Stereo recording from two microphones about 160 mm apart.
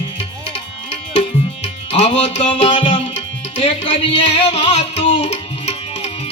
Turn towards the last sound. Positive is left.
turn(degrees=40)  # may be behind; listen again after turning